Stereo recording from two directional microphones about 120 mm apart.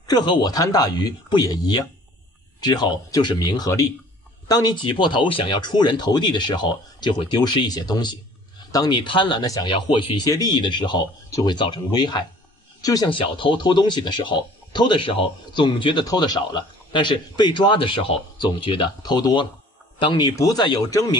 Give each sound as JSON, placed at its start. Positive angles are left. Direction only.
{"t": 0.0, "sound": "speech", "side_deg": 35}
{"t": 13.1, "sound": "speech", "side_deg": 45}